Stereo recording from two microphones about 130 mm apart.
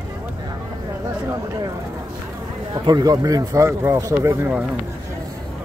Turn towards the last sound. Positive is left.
turn(degrees=-20)  # may be behind; listen again after turning